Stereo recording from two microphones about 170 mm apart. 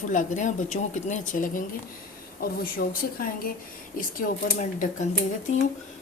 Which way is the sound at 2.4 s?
60° left (ahead or behind).